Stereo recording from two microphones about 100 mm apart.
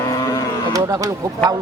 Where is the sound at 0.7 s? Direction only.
35° right (ahead or behind).